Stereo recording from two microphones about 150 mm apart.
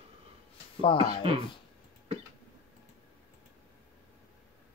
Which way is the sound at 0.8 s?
35° left (ahead or behind).